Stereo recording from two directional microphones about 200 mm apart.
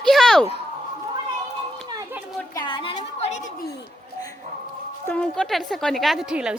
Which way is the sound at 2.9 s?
35° left (ahead or behind).